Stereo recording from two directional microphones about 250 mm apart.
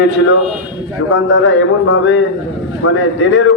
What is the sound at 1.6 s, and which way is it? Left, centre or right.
A man's voice, left.